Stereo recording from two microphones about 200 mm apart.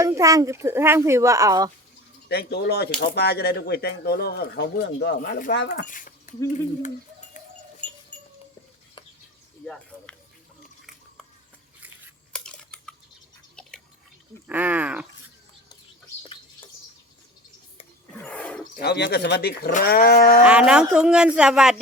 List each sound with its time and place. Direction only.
0.0 s speech: 15° right (ahead or behind)
2.3 s speech: 55° left (ahead or behind)
7.8 s a sound: 5° left (ahead or behind)
12.3 s a sound: 5° left (ahead or behind)
13.6 s drip: 5° left (ahead or behind)
14.4 s speech: 10° right (ahead or behind)
18.2 s roaring cats: 5° left (ahead or behind)
18.8 s speech: 55° left (ahead or behind)
20.4 s speech: 5° right (ahead or behind)